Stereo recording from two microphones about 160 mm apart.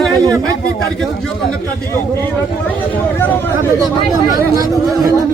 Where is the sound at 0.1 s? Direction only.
20° right (ahead or behind).